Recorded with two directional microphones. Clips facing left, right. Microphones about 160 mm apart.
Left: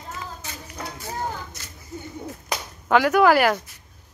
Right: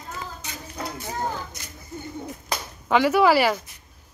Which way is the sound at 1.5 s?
15° right (ahead or behind).